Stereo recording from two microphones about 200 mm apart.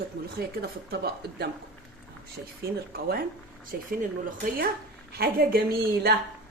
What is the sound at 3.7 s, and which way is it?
Speech, 50° right (ahead or behind).